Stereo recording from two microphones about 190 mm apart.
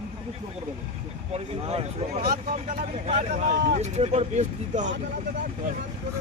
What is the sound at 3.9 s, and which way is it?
Speech, 35° right (ahead or behind).